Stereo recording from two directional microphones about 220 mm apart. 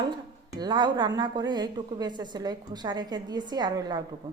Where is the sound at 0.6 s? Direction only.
20° right (ahead or behind).